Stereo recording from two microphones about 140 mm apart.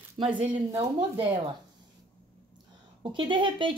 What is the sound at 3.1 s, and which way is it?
Speech, 35° right (ahead or behind).